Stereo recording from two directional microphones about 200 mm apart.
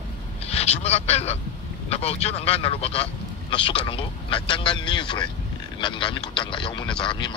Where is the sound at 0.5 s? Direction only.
30° left (ahead or behind).